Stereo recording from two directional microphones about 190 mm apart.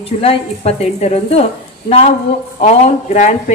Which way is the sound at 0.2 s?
30° left (ahead or behind).